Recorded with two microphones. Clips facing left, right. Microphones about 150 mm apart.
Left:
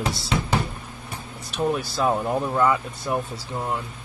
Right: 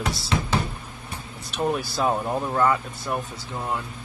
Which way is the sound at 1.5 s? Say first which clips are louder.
Left 1 dB; centre (ahead or behind).